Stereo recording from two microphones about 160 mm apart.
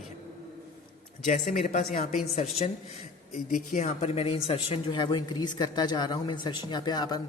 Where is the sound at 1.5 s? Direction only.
55° left (ahead or behind).